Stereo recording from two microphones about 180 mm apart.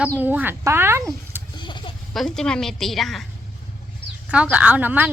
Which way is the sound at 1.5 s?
25° left (ahead or behind).